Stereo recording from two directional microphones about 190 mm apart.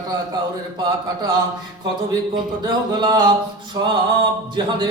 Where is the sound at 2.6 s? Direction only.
20° right (ahead or behind).